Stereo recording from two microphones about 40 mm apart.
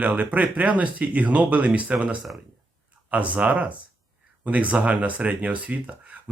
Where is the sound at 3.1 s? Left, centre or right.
Right.